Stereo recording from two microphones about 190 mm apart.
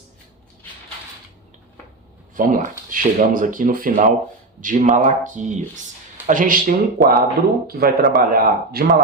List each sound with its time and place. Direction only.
2.3 s speech: 45° right (ahead or behind)